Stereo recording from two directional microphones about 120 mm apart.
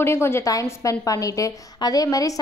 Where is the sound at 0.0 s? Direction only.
20° left (ahead or behind).